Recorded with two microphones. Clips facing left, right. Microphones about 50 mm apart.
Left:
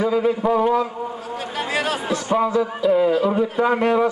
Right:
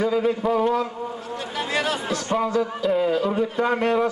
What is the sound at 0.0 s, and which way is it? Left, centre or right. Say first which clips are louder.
A man's voice: left 2 dB; centre.